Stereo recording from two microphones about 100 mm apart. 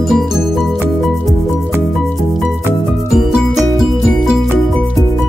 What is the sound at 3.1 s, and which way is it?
Music, centre (ahead or behind).